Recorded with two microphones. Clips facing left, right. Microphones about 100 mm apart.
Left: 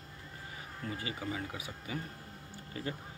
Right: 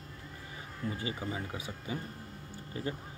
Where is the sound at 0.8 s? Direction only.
25° right (ahead or behind).